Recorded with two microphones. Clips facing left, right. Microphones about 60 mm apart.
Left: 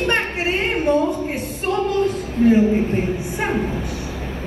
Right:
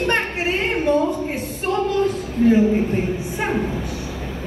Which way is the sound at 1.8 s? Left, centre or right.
Left.